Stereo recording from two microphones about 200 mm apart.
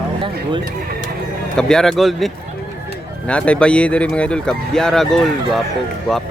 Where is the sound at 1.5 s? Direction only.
5° left (ahead or behind).